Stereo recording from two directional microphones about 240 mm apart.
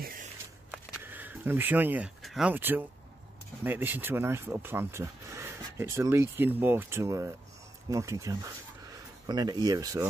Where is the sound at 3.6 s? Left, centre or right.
Centre.